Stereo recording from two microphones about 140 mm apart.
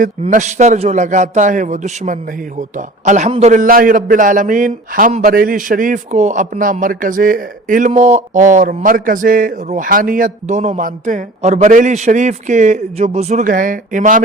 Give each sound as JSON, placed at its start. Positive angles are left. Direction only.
{"t": 0.3, "sound": "a man's voice", "side_deg": -60}
{"t": 3.5, "sound": "a man's voice", "side_deg": -80}